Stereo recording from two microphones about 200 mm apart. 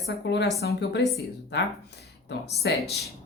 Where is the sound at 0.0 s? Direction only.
60° left (ahead or behind).